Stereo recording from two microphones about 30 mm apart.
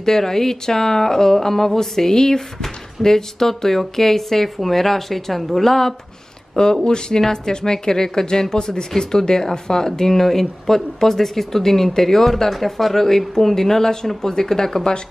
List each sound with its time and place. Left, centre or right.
0.0 s speech: centre
6.5 s speech: left